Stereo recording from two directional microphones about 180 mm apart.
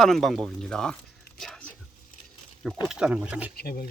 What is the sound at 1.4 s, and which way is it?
Whispering, 5° left (ahead or behind).